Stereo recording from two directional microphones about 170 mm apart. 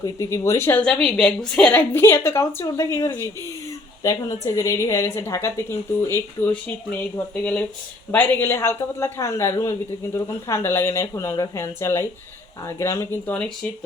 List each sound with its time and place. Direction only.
0.0 s a woman's voice: 15° left (ahead or behind)